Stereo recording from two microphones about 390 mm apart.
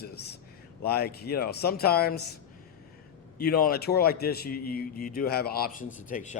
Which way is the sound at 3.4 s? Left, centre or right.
Left.